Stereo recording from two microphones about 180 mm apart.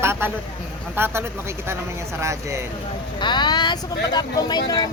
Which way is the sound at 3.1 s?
25° left (ahead or behind).